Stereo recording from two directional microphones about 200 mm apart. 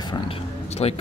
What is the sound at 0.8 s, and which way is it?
Speech, 30° left (ahead or behind).